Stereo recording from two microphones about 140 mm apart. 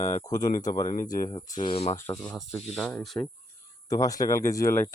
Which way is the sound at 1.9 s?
20° left (ahead or behind).